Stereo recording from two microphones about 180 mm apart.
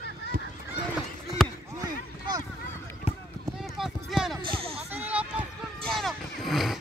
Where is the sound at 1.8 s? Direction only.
20° right (ahead or behind).